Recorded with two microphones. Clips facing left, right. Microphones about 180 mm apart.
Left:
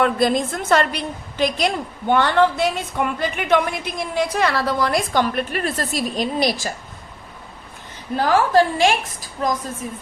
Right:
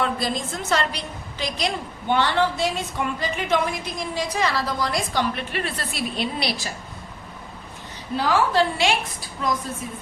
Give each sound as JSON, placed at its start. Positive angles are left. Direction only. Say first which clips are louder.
{"t": 0.0, "sound": "a woman's voice", "louder": "left 7 dB", "side_deg": 55}
{"t": 8.1, "sound": "a woman's voice", "louder": "left 4 dB", "side_deg": 45}